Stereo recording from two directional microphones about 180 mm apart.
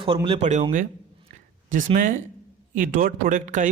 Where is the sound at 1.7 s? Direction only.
45° right (ahead or behind).